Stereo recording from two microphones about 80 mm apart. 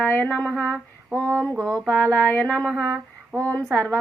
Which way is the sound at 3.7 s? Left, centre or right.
Centre.